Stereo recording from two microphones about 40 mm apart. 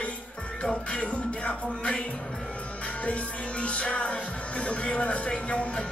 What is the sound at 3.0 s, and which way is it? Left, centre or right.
Music, left.